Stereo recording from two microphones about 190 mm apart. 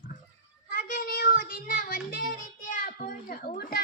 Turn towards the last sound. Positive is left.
turn(degrees=50)  # may be behind; listen again after turning